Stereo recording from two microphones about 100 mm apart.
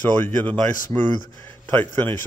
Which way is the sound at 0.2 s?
20° left (ahead or behind).